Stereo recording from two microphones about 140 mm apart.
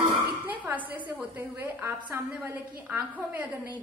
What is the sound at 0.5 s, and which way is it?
A woman's voice, 10° right (ahead or behind).